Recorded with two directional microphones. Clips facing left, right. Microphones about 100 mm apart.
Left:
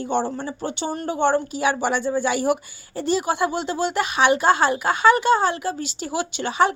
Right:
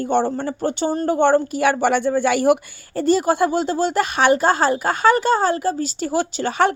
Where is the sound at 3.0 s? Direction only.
45° right (ahead or behind).